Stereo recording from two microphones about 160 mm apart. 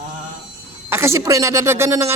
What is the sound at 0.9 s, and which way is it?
A man's voice, 15° right (ahead or behind).